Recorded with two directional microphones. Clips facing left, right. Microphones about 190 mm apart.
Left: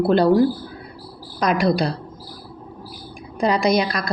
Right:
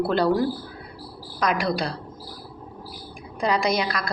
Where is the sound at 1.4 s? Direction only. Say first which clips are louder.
Left 5 dB; 20° left (ahead or behind).